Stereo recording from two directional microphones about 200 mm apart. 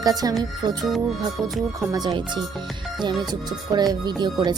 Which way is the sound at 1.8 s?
20° right (ahead or behind).